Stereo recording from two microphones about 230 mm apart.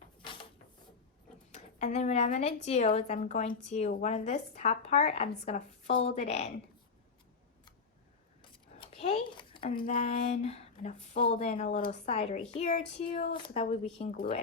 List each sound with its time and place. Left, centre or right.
1.5 s speech: left
8.4 s a sound: left
9.9 s speech: left